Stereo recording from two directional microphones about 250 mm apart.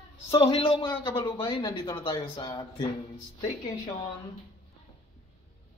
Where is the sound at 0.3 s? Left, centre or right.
Left.